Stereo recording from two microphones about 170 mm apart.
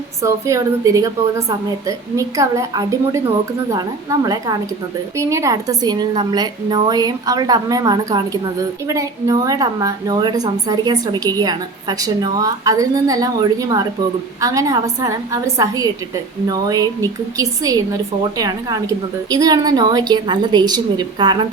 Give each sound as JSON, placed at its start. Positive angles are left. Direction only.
{"t": 0.2, "sound": "a woman's voice", "side_deg": -20}